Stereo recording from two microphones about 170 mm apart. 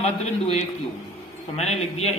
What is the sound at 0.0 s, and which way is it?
Speech, 40° left (ahead or behind).